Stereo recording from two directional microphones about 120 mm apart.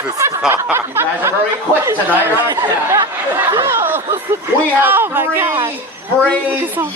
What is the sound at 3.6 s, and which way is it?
Snicker, 20° right (ahead or behind).